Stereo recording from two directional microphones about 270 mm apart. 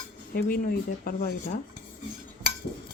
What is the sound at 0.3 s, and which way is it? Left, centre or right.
Speech, left.